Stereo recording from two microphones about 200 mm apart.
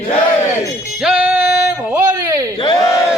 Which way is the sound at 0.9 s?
5° right (ahead or behind).